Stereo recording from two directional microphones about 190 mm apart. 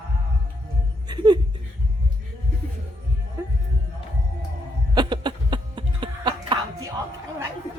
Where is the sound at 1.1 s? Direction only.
25° right (ahead or behind).